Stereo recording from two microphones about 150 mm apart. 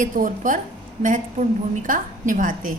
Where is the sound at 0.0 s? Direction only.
60° right (ahead or behind).